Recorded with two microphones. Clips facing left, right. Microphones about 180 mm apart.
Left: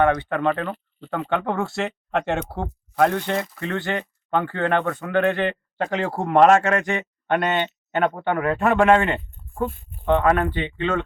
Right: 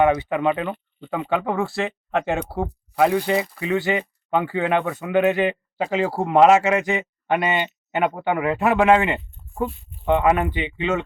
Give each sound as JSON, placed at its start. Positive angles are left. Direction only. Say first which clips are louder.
{"t": 0.0, "sound": "speech", "louder": "right 1 dB", "side_deg": -10}
{"t": 9.6, "sound": "speech", "louder": "left 2 dB", "side_deg": 50}
{"t": 10.1, "sound": "speech", "louder": "even", "side_deg": -10}